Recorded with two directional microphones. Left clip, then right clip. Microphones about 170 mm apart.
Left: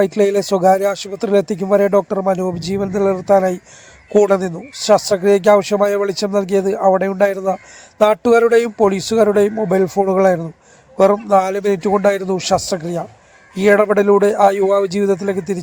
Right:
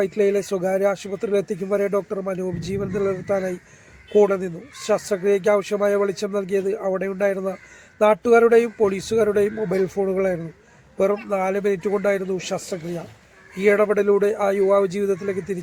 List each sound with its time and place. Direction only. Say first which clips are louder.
0.0 s speech: left 6 dB; 30° left (ahead or behind)